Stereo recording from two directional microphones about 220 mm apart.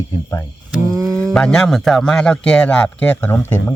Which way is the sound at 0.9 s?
15° right (ahead or behind).